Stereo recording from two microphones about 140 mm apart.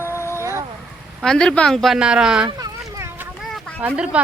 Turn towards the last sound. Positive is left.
turn(degrees=-10)  # may be behind; listen again after turning